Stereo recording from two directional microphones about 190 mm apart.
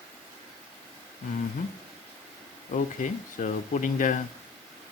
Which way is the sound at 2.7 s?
45° left (ahead or behind).